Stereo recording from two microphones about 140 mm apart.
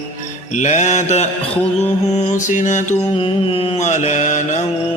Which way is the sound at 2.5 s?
65° left (ahead or behind).